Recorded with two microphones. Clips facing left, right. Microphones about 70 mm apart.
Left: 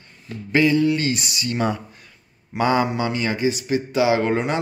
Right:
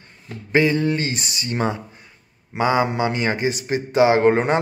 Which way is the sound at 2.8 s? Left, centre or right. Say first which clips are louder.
Right 2 dB; right.